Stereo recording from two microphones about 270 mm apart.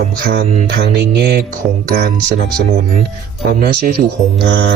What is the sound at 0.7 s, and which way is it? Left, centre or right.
Speech, right.